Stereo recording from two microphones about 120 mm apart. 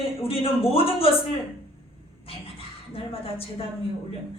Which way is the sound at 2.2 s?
50° left (ahead or behind).